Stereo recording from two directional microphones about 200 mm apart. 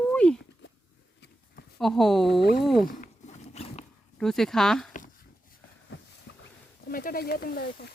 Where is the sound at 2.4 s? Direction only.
50° left (ahead or behind).